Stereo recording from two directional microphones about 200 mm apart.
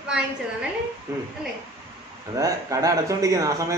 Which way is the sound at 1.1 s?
15° right (ahead or behind).